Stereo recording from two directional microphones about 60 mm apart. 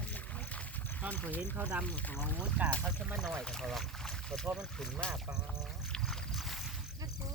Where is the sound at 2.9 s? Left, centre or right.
Centre.